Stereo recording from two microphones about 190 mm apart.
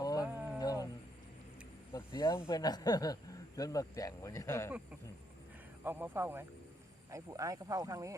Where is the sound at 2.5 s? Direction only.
20° left (ahead or behind).